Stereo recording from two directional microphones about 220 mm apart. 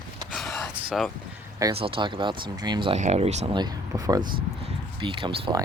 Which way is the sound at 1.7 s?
25° right (ahead or behind).